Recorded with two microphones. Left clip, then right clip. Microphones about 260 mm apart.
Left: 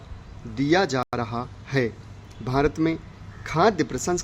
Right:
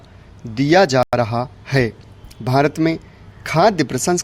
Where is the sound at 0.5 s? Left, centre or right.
Right.